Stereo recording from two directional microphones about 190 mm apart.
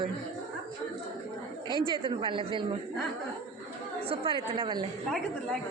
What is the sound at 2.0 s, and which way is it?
Speech, 25° right (ahead or behind).